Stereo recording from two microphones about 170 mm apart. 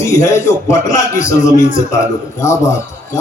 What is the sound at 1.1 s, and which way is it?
Speech, 45° left (ahead or behind).